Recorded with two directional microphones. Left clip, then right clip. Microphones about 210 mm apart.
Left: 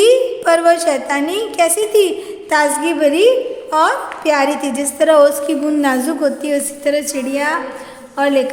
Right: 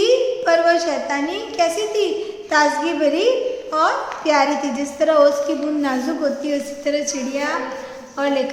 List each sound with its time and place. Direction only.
0.0 s a woman's voice: 50° left (ahead or behind)